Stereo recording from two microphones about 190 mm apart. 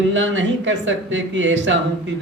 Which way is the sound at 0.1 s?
75° right (ahead or behind).